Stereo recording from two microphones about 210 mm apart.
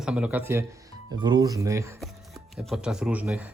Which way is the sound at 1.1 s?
20° right (ahead or behind).